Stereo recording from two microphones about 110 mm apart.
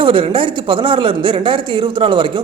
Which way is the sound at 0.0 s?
50° right (ahead or behind).